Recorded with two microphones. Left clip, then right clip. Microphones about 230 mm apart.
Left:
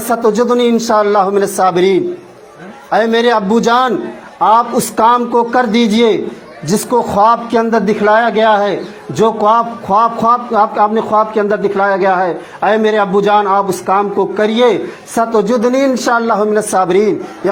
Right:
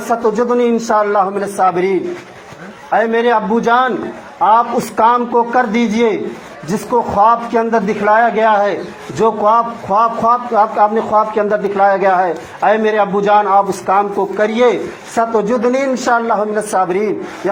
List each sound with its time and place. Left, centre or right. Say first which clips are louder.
0.1 s a man's voice: left 2 dB; left